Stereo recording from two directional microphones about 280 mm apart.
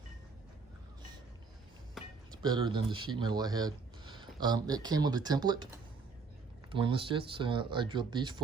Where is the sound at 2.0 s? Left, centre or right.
Centre.